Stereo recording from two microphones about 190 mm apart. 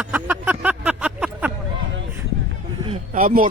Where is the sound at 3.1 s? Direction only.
45° right (ahead or behind).